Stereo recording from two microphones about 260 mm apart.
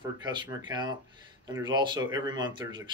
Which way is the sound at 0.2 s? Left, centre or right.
Centre.